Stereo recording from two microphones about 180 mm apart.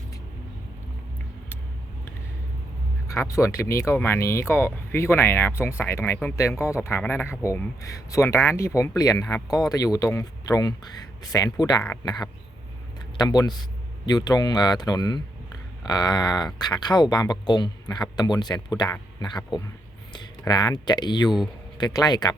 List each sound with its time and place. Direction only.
3.1 s speech: 15° left (ahead or behind)
13.1 s speech: 20° left (ahead or behind)
20.4 s speech: 20° left (ahead or behind)